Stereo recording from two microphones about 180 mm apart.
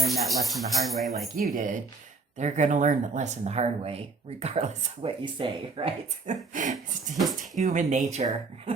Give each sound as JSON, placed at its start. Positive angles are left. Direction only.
{"t": 0.0, "sound": "speech", "side_deg": 0}
{"t": 1.5, "sound": "a sound", "side_deg": -45}
{"t": 2.4, "sound": "speech", "side_deg": -40}
{"t": 5.2, "sound": "speech", "side_deg": -30}
{"t": 6.2, "sound": "a sound", "side_deg": -45}
{"t": 7.6, "sound": "speech", "side_deg": -40}